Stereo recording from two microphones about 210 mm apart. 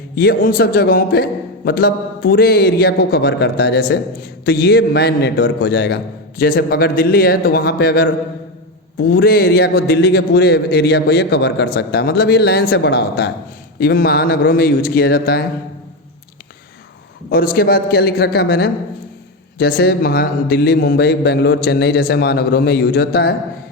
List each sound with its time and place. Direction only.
0.2 s a man's voice: 45° left (ahead or behind)
17.3 s a man's voice: 45° left (ahead or behind)